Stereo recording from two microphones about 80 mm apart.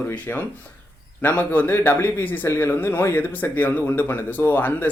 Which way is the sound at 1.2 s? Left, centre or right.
Left.